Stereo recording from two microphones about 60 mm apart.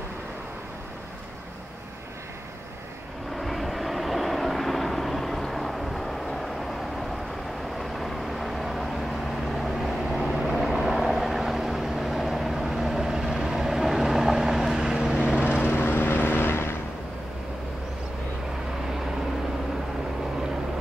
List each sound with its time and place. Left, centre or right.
3.3 s vehicle: centre
15.7 s vehicle: left